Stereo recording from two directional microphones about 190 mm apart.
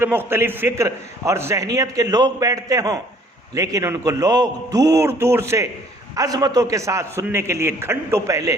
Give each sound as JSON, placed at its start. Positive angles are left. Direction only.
{"t": 0.0, "sound": "a man's voice", "side_deg": -10}